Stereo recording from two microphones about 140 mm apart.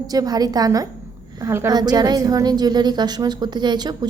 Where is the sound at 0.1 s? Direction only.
25° right (ahead or behind).